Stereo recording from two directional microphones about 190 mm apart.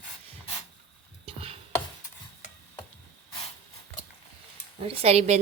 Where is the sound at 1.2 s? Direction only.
30° right (ahead or behind).